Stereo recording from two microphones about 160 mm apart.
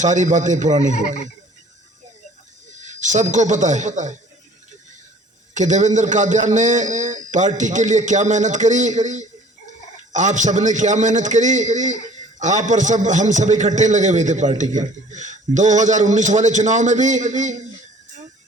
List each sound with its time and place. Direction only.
0.0 s a man's voice: 50° right (ahead or behind)
2.7 s a man's voice: 50° right (ahead or behind)
5.5 s a man's voice: 50° right (ahead or behind)